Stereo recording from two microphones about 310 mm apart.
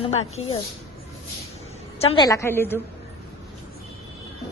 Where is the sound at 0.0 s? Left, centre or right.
Centre.